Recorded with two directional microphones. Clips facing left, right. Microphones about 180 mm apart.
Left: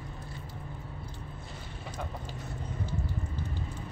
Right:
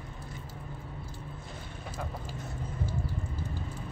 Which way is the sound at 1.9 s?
5° right (ahead or behind).